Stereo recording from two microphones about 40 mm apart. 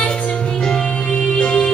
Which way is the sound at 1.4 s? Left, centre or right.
Left.